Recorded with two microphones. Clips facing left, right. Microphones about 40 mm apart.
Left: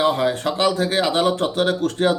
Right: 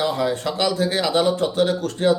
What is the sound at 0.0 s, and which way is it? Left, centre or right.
A man's voice, left.